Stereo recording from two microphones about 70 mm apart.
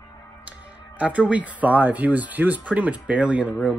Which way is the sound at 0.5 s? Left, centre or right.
Centre.